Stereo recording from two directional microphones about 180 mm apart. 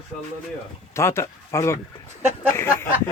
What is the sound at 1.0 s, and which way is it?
Speech, 15° left (ahead or behind).